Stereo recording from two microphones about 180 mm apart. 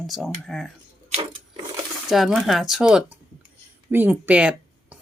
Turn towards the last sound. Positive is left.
turn(degrees=-10)  # may be behind; listen again after turning